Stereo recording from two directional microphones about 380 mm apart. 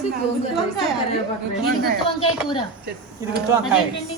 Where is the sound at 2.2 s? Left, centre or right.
Centre.